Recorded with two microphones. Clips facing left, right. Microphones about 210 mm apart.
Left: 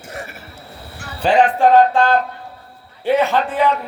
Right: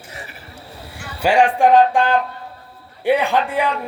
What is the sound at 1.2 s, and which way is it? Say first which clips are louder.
Speech: left 1 dB; 10° right (ahead or behind).